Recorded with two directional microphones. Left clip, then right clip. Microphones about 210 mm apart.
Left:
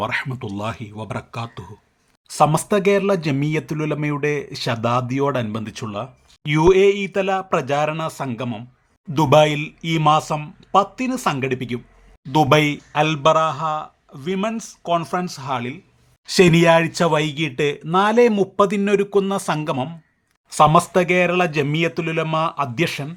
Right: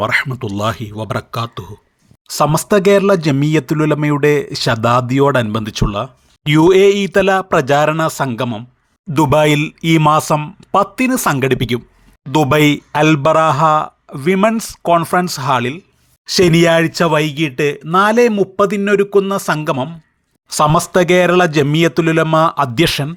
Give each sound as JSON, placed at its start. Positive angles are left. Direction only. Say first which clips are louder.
{"t": 0.0, "sound": "speech", "louder": "right 8 dB", "side_deg": -20}
{"t": 9.1, "sound": "speech", "louder": "right 3 dB", "side_deg": -30}
{"t": 16.2, "sound": "speech", "louder": "right 3 dB", "side_deg": -15}
{"t": 20.5, "sound": "speech", "louder": "right 1 dB", "side_deg": -20}